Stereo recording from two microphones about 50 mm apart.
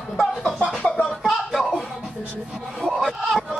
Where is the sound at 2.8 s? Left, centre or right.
Centre.